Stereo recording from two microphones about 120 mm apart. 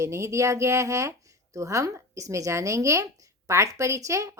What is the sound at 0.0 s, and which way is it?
Speech, 25° right (ahead or behind).